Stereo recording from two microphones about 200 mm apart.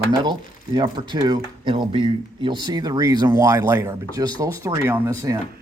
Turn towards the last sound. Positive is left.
turn(degrees=-15)  # may be behind; listen again after turning